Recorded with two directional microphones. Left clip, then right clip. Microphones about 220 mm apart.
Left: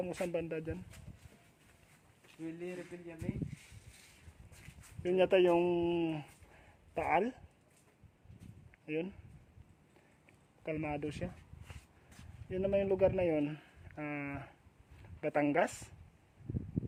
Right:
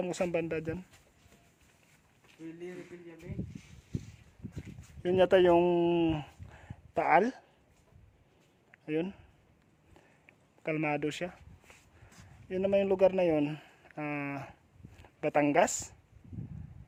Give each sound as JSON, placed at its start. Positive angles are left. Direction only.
{"t": 0.0, "sound": "speech", "side_deg": -35}
{"t": 5.0, "sound": "speech", "side_deg": -30}
{"t": 8.7, "sound": "a sound", "side_deg": -25}
{"t": 10.2, "sound": "speech", "side_deg": -30}
{"t": 12.5, "sound": "speech", "side_deg": -25}